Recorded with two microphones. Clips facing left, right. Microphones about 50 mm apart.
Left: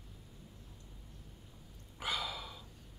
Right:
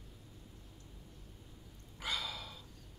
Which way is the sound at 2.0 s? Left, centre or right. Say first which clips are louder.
Left 2 dB; centre.